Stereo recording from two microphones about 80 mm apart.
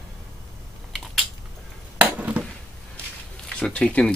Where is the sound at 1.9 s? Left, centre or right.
Centre.